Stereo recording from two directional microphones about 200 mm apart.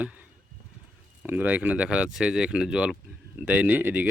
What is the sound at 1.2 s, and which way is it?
Speech, 10° right (ahead or behind).